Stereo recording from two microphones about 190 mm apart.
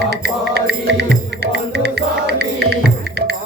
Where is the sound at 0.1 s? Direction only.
60° right (ahead or behind).